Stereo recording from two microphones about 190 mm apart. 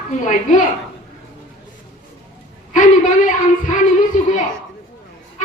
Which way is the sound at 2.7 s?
40° left (ahead or behind).